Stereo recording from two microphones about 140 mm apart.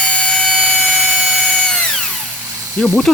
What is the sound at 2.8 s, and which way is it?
Speech, 5° left (ahead or behind).